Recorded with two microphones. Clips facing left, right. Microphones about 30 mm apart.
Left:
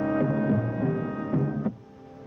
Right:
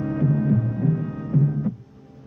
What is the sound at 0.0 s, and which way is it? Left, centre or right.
Music, left.